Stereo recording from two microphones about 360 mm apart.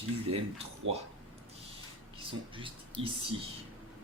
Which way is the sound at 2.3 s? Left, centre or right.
Centre.